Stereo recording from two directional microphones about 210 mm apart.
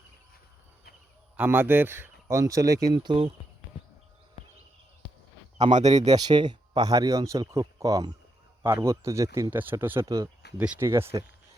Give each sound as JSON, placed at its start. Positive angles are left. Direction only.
{"t": 1.4, "sound": "speech", "side_deg": -10}
{"t": 5.5, "sound": "speech", "side_deg": -35}
{"t": 6.1, "sound": "speech", "side_deg": -20}